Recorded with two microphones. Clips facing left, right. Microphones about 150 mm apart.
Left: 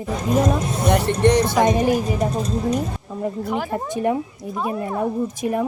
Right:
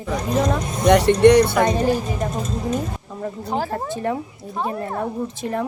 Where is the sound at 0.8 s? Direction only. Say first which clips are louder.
Right 5 dB; 70° right (ahead or behind).